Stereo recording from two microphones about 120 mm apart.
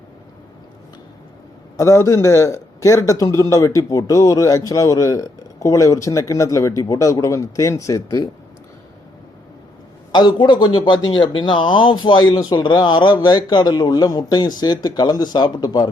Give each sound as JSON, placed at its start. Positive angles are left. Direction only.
{"t": 1.7, "sound": "a man's voice", "side_deg": 25}
{"t": 10.1, "sound": "a man's voice", "side_deg": 40}